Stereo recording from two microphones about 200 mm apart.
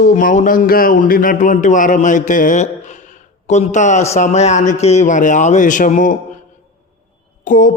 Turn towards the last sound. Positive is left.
turn(degrees=40)  # may be behind; listen again after turning